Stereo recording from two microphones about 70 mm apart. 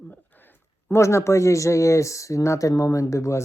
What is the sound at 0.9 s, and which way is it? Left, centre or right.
Speech, left.